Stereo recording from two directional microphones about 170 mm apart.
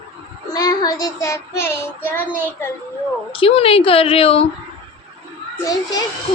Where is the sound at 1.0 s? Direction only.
20° left (ahead or behind).